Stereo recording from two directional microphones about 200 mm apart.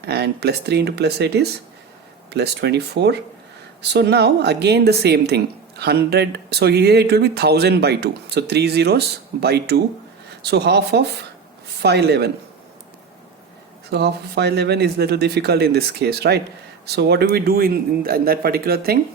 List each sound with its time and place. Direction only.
0.0 s a woman's voice: 55° right (ahead or behind)
13.9 s a woman's voice: 55° right (ahead or behind)